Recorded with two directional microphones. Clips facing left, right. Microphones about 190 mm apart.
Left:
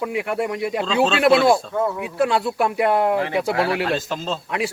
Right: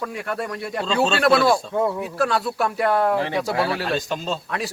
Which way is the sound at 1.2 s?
25° left (ahead or behind).